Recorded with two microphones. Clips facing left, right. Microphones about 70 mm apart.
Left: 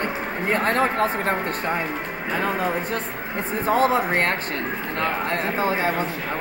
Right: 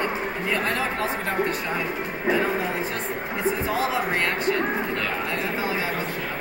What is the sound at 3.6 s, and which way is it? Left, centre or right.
Speech, left.